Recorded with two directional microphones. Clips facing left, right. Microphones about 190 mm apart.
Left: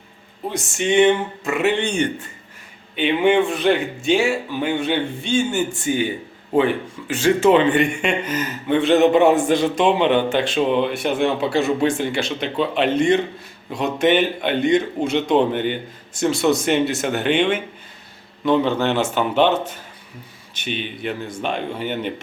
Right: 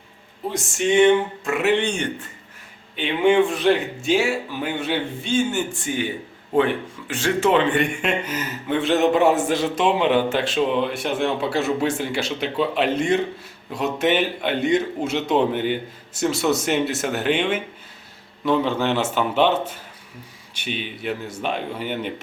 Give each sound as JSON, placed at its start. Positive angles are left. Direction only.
{"t": 0.5, "sound": "speech", "side_deg": 0}
{"t": 20.5, "sound": "speech", "side_deg": -10}